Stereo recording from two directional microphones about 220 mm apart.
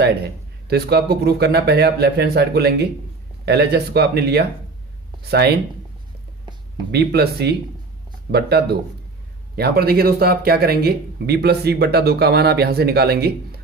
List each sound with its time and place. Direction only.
0.7 s speech: 45° right (ahead or behind)
6.9 s speech: 50° right (ahead or behind)